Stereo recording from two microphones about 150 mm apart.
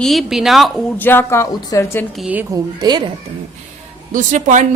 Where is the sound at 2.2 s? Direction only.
10° right (ahead or behind).